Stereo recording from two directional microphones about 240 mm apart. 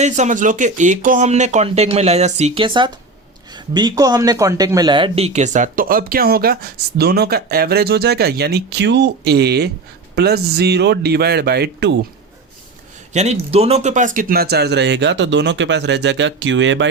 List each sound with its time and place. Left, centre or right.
0.0 s speech: right
13.1 s speech: right